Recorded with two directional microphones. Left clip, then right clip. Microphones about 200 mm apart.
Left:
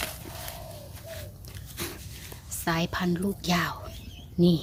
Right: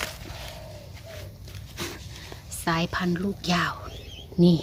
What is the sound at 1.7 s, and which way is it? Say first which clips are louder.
Dog: right 2 dB; 10° right (ahead or behind).